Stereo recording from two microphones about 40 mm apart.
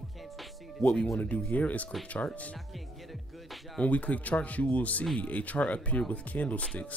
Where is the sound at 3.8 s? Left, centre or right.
Left.